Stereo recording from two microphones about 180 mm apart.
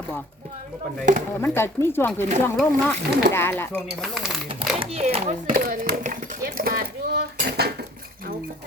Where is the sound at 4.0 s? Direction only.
Centre (ahead or behind).